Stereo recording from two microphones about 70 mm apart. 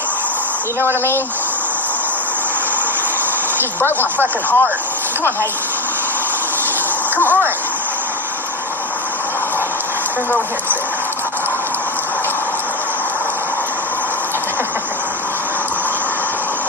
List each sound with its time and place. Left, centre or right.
3.6 s speech: left